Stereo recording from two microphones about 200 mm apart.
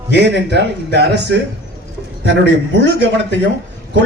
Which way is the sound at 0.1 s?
60° right (ahead or behind).